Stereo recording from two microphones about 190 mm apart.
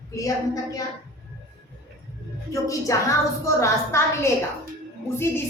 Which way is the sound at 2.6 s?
15° left (ahead or behind).